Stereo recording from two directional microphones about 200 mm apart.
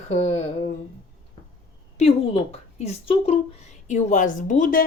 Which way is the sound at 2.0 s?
30° left (ahead or behind).